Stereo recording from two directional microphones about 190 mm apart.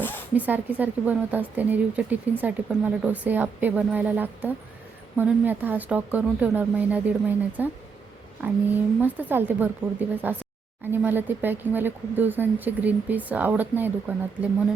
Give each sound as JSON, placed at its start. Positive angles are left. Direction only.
{"t": 0.3, "sound": "speech", "side_deg": -10}